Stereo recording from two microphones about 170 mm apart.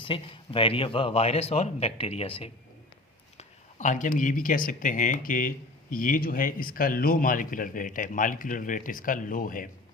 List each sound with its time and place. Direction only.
0.0 s a man's voice: 30° left (ahead or behind)
3.3 s a man's voice: 45° left (ahead or behind)